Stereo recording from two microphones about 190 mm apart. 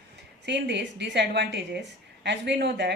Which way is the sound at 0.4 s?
65° right (ahead or behind).